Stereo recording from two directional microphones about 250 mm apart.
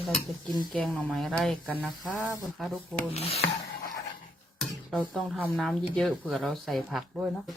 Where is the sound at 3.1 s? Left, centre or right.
Left.